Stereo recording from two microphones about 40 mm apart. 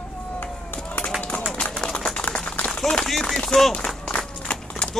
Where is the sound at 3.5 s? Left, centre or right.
Centre.